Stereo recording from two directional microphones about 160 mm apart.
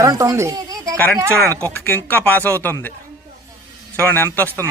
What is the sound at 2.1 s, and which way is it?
Speech, 10° left (ahead or behind).